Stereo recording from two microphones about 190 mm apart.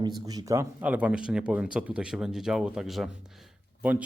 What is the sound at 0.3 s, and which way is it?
A man's voice, 20° right (ahead or behind).